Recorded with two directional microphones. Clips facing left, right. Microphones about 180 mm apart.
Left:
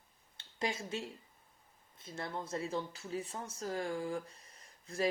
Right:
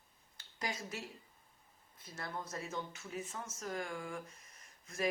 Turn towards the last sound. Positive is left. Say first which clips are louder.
# left 3 dB
turn(degrees=30)  # may be behind; listen again after turning